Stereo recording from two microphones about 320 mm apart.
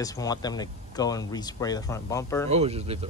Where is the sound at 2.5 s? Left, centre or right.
Centre.